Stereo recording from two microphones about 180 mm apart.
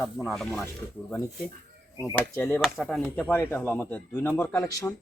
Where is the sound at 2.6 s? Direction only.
Centre (ahead or behind); by 4.9 s 15° left (ahead or behind).